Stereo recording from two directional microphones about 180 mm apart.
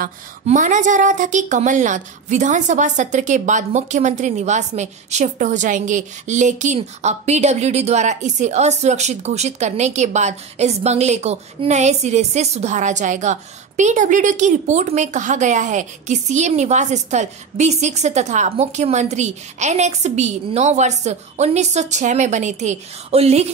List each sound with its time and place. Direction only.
0.0 s a woman's voice: 45° right (ahead or behind)